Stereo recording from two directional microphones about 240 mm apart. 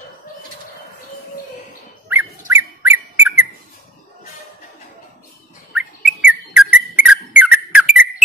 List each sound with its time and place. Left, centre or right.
2.0 s dog: centre
5.7 s bird: centre
6.7 s whistle: centre